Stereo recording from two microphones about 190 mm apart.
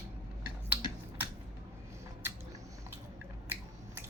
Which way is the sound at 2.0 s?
15° right (ahead or behind).